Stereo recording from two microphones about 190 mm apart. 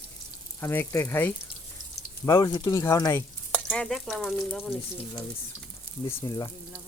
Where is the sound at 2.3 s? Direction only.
20° left (ahead or behind).